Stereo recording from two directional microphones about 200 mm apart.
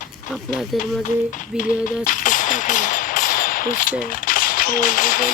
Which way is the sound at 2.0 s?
40° left (ahead or behind).